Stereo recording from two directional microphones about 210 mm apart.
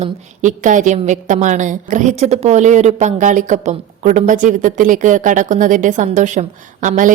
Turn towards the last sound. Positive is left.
turn(degrees=-40)  # may be behind; listen again after turning